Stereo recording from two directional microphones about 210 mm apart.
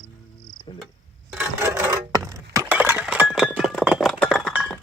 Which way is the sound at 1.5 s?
15° right (ahead or behind).